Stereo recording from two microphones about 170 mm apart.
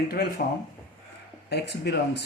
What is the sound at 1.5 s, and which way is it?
Speech, 80° left.